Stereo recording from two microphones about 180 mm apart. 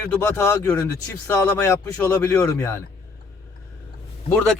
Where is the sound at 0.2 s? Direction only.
15° left (ahead or behind).